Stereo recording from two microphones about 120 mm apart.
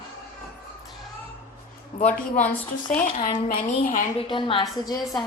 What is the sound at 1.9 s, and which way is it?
Speech, 90° left.